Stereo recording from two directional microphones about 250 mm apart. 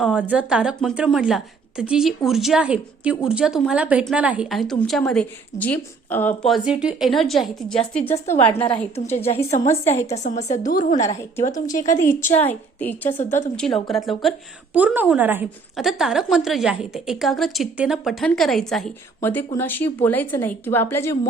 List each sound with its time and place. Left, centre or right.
0.0 s a woman's voice: centre
8.0 s a woman's voice: left
12.5 s a woman's voice: centre